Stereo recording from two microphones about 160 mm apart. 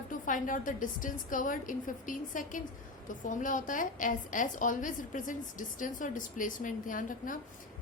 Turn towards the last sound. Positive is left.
turn(degrees=55)  # may be behind; listen again after turning